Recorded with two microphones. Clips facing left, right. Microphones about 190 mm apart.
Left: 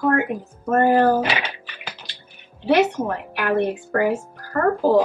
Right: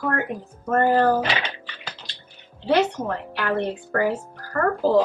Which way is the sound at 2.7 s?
10° left (ahead or behind).